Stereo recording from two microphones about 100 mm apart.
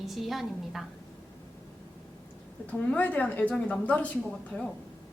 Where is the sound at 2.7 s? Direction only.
15° left (ahead or behind).